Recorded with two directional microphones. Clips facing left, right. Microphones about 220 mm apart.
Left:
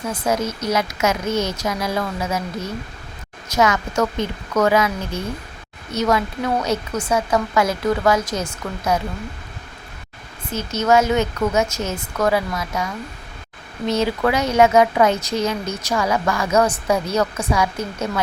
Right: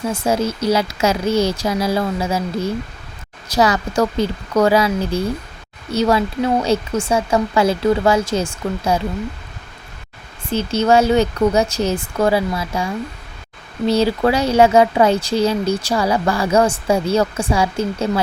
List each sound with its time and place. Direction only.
0.1 s speech: 30° right (ahead or behind)
10.5 s speech: 30° right (ahead or behind)